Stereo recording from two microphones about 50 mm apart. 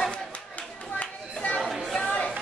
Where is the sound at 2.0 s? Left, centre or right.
Left.